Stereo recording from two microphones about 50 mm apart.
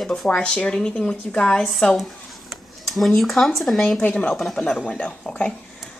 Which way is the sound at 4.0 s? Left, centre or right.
Left.